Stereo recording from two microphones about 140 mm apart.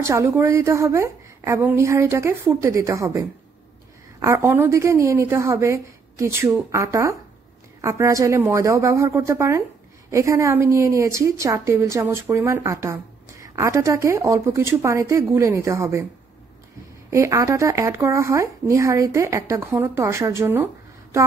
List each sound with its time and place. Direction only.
0.0 s a woman's voice: 20° right (ahead or behind)
17.1 s a woman's voice: 20° right (ahead or behind)